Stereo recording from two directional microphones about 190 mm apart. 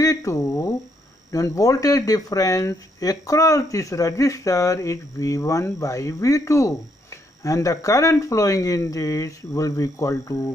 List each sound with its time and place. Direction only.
0.0 s speech: 15° left (ahead or behind)